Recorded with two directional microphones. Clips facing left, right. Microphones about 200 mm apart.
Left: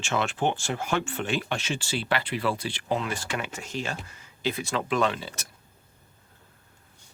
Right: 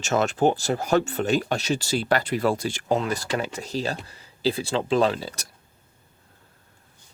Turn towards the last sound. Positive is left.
turn(degrees=-35)  # may be behind; listen again after turning